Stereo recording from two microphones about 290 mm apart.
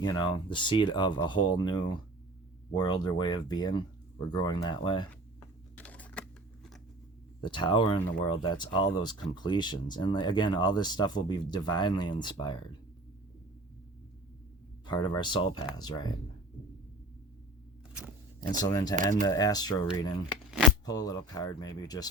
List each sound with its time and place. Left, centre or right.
0.0 s speech: centre
5.7 s a sound: centre
7.4 s speech: centre
14.8 s speech: centre
18.6 s speech: centre
18.9 s speech: right
19.2 s speech: centre
20.5 s shuffling cards: centre
20.8 s speech: centre